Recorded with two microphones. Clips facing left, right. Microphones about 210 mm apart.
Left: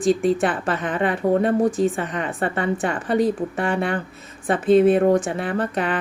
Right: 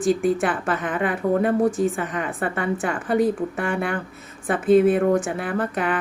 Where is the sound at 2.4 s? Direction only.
30° left (ahead or behind).